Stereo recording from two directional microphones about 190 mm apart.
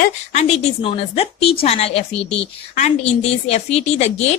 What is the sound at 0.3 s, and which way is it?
A woman's voice, 30° left (ahead or behind).